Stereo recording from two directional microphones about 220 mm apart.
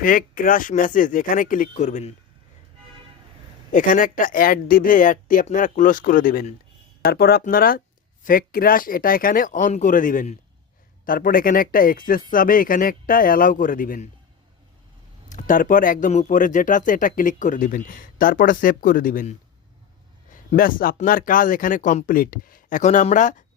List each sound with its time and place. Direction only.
0.0 s speech: 40° left (ahead or behind)
3.7 s speech: 35° left (ahead or behind)
15.3 s speech: 35° left (ahead or behind)